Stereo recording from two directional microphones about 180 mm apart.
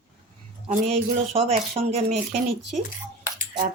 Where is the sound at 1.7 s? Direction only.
35° right (ahead or behind).